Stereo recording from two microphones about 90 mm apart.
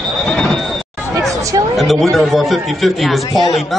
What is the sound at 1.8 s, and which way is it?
A man's voice, centre (ahead or behind).